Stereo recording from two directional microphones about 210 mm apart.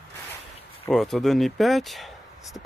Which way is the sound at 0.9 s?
Centre (ahead or behind).